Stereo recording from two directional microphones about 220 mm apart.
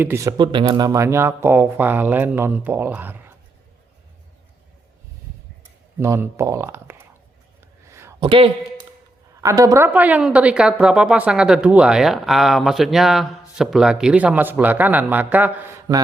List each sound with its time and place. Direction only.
0.0 s speech: 10° right (ahead or behind)
6.0 s speech: 10° right (ahead or behind)
7.9 s a sound: 10° right (ahead or behind)
8.2 s a woman's voice: 25° right (ahead or behind)